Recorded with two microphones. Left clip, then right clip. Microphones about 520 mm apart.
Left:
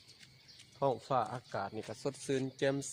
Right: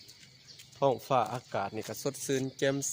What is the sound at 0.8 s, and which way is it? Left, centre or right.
Speech, left.